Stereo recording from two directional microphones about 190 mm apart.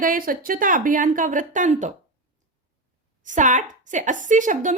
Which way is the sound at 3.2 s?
40° right (ahead or behind).